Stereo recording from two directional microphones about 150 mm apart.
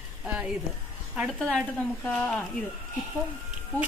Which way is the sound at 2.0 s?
10° left (ahead or behind).